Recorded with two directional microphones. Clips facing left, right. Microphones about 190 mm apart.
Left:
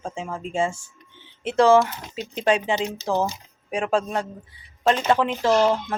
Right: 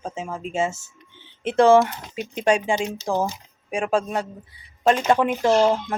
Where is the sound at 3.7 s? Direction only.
10° right (ahead or behind).